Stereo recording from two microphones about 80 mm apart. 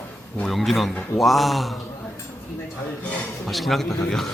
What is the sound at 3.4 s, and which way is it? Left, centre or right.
Speech, centre.